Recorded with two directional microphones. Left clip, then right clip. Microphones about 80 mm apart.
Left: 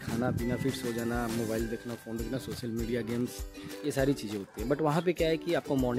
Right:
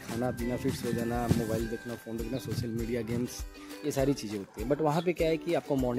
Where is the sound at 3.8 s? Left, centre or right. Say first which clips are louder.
Even; left.